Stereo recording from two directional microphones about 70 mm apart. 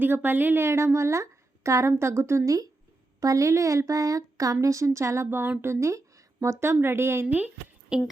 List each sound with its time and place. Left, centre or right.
0.0 s a woman's voice: right
7.3 s speech: right
7.9 s a woman's voice: centre